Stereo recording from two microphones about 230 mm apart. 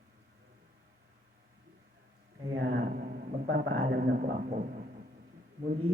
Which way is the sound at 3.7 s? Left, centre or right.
Right.